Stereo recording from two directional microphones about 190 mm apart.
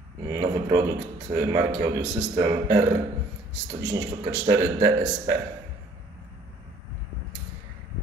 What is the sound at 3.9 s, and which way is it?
Speech, 20° right (ahead or behind).